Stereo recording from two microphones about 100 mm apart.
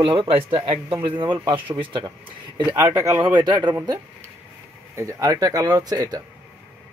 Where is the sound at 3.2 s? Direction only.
45° right (ahead or behind).